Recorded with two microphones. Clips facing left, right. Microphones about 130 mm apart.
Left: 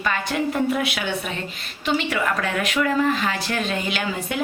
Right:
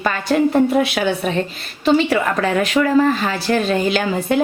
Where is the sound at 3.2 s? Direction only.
35° right (ahead or behind).